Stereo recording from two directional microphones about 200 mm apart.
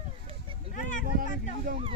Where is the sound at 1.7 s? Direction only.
40° right (ahead or behind).